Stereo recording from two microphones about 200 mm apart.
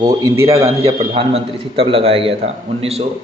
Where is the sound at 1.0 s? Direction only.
30° right (ahead or behind).